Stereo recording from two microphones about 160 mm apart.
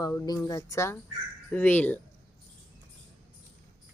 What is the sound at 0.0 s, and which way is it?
A woman's voice, 20° left (ahead or behind).